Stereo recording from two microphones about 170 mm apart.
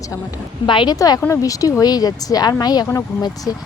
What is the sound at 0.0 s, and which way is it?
Speech, 20° left (ahead or behind).